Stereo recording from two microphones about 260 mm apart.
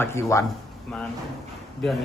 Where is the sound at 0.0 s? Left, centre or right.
Centre.